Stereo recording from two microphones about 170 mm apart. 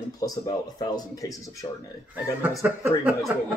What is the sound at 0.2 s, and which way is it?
A man's voice, 20° left (ahead or behind).